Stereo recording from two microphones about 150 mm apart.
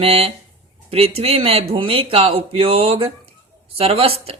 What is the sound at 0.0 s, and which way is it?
A woman's voice, 40° right (ahead or behind).